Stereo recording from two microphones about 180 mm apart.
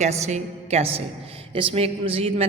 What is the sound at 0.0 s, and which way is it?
A woman's voice, 40° right (ahead or behind).